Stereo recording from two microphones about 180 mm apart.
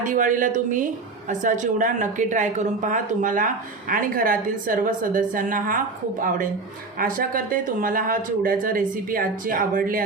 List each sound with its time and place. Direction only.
0.0 s a woman's voice: 45° right (ahead or behind)